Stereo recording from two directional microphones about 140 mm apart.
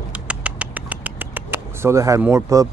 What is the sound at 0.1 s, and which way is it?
Rodents, 10° right (ahead or behind).